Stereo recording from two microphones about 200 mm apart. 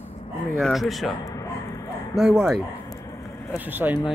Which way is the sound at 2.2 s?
5° right (ahead or behind).